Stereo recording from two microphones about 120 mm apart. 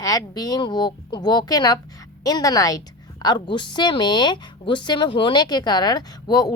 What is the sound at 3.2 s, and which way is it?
Speech, 40° left (ahead or behind).